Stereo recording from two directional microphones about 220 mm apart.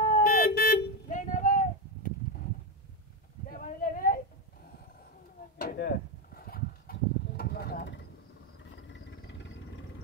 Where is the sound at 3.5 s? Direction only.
40° left (ahead or behind).